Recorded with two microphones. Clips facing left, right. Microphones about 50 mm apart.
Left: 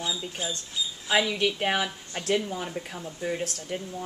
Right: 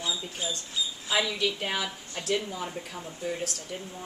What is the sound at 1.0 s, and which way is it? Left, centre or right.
A woman's voice, left.